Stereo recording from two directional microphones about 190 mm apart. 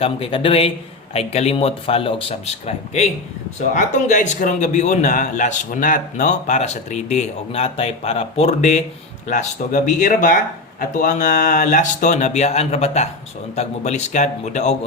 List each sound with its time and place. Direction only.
0.0 s a man's voice: 30° left (ahead or behind)